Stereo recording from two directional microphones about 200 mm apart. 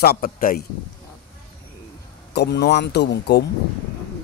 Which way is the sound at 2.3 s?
55° left (ahead or behind).